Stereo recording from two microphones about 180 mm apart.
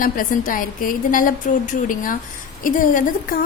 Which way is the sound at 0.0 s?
50° left (ahead or behind).